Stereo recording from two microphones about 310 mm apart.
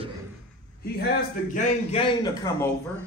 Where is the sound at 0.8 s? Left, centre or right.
Left.